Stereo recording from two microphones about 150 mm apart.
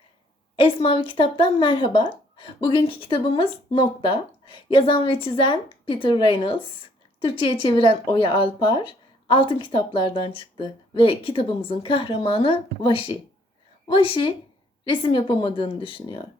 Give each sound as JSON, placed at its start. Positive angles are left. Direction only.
{"t": 0.5, "sound": "a woman's voice", "side_deg": 35}